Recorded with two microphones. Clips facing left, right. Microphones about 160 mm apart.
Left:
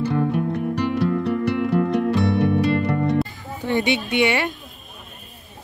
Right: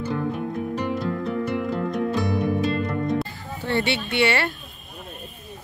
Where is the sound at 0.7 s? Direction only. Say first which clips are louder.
Left 6 dB; 75° left (ahead or behind).